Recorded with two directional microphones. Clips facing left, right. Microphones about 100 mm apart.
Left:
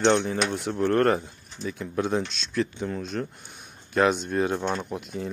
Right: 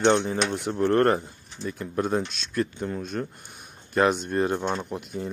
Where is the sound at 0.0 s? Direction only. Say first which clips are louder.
Even; 5° right (ahead or behind).